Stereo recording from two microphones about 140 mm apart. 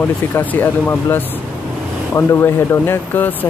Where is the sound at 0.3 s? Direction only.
15° left (ahead or behind).